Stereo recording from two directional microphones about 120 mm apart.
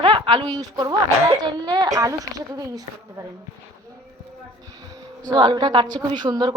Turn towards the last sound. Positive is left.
turn(degrees=-35)  # may be behind; listen again after turning